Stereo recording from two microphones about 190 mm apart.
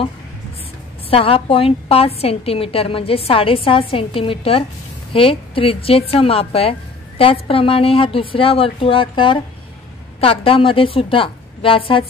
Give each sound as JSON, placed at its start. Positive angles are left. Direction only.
{"t": 1.1, "sound": "a woman's voice", "side_deg": 30}